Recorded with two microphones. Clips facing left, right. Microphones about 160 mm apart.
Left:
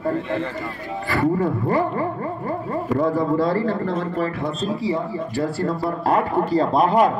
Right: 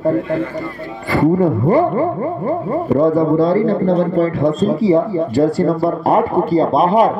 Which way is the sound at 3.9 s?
35° right (ahead or behind).